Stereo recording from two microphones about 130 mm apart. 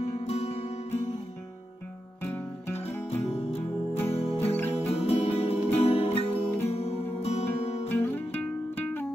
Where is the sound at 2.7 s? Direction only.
55° left (ahead or behind).